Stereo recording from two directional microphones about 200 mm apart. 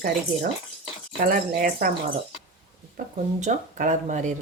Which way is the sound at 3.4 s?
35° right (ahead or behind).